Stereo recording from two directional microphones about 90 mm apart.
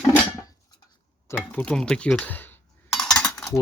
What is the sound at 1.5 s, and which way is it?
Speech, 10° left (ahead or behind).